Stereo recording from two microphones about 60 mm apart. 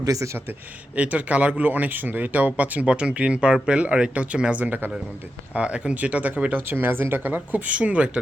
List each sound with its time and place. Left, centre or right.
0.0 s a man's voice: right
0.9 s speech: right
6.7 s speech: right